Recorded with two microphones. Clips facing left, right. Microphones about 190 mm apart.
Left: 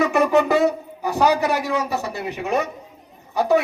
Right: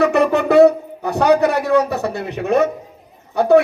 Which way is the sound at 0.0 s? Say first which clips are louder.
Right 2 dB; 60° right (ahead or behind).